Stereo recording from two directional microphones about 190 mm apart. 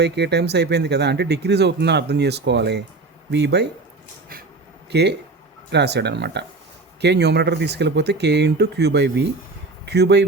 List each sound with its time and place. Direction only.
0.0 s speech: 60° right (ahead or behind)
4.9 s speech: 60° right (ahead or behind)